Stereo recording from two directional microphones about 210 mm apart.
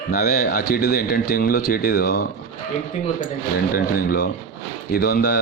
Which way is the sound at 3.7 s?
45° left (ahead or behind).